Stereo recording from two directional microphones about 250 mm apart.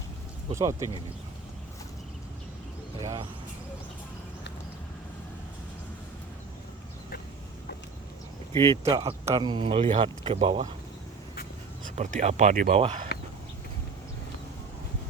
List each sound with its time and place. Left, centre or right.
0.5 s speech: centre
3.0 s speech: centre
8.7 s speech: centre
11.9 s speech: right